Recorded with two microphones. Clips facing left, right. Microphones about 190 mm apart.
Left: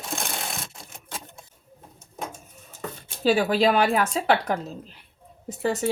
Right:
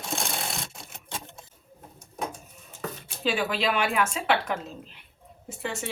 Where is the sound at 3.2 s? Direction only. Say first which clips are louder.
Left 7 dB; 40° left (ahead or behind).